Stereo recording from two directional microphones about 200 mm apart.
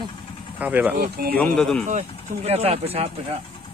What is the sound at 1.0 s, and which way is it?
Speech, 50° right (ahead or behind).